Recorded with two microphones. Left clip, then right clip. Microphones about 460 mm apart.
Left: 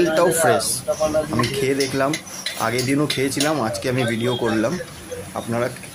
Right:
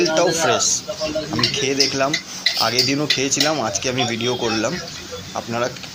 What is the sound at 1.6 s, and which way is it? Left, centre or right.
Speech, left.